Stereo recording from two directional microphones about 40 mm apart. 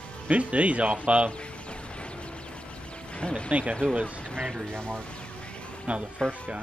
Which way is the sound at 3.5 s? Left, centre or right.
Right.